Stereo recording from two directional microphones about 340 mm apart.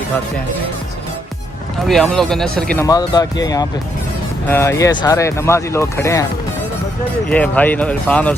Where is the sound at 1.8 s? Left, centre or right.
Centre.